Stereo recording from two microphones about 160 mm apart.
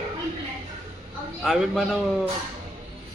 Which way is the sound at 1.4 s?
Centre (ahead or behind).